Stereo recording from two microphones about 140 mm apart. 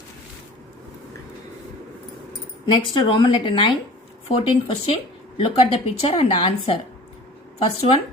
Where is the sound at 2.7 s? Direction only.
35° left (ahead or behind).